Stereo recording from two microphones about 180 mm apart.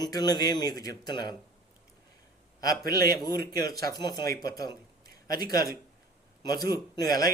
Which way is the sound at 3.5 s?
20° left (ahead or behind).